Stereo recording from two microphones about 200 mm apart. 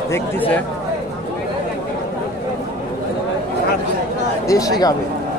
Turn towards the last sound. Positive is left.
turn(degrees=20)  # may be behind; listen again after turning